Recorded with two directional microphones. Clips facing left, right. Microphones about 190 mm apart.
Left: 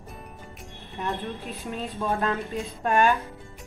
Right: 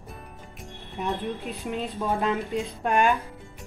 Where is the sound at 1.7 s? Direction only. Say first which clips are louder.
Right 1 dB; 15° right (ahead or behind).